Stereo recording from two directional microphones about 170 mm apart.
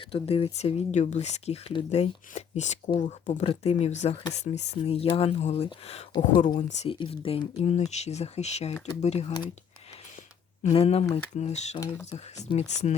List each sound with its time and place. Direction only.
0.0 s speech: 35° left (ahead or behind)
6.3 s speech: 30° left (ahead or behind)
10.6 s speech: 40° left (ahead or behind)